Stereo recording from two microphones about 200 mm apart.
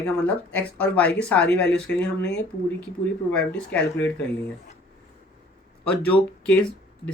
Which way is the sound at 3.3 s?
5° left (ahead or behind).